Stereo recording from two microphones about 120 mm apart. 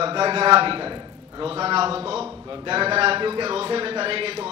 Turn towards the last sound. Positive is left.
turn(degrees=-50)  # may be behind; listen again after turning